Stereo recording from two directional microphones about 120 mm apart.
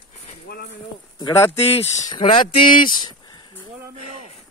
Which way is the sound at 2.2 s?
45° left (ahead or behind).